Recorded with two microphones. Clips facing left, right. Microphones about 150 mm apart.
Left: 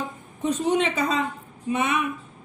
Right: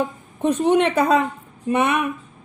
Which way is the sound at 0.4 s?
60° right (ahead or behind).